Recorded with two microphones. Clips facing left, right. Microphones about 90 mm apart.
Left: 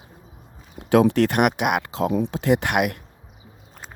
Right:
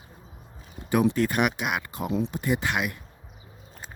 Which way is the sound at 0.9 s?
80° left.